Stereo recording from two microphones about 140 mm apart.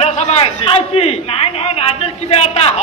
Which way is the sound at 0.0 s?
50° left (ahead or behind).